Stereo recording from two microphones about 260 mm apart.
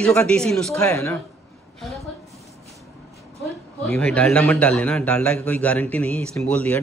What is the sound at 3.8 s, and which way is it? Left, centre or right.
A woman's voice, centre.